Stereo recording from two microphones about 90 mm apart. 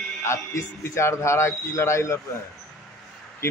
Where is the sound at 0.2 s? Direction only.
30° left (ahead or behind).